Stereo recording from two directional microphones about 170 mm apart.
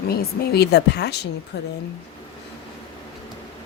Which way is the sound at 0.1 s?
70° left (ahead or behind).